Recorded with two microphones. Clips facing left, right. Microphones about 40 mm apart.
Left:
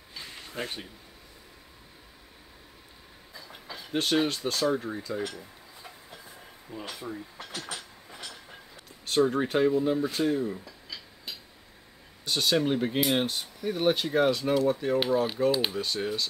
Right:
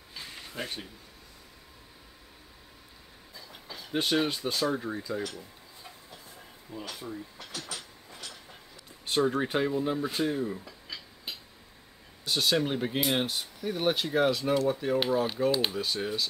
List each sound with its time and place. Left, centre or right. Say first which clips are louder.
0.1 s a sound: even; centre
0.5 s speech: left 2 dB; centre
3.9 s speech: left 1 dB; centre
6.9 s speech: left 3 dB; left
7.7 s train: left 2 dB; left
9.0 s a sound: left 2 dB; centre
9.3 s speech: left 4 dB; centre
12.3 s speech: left 2 dB; centre